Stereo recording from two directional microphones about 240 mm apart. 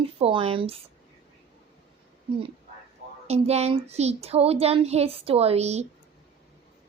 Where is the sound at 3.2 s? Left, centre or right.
Right.